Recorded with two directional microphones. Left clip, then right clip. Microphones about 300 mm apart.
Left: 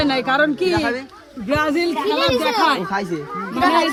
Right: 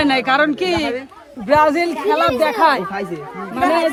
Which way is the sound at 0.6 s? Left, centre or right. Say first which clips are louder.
Even; right.